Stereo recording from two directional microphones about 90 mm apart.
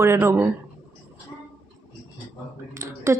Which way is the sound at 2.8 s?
35° right (ahead or behind).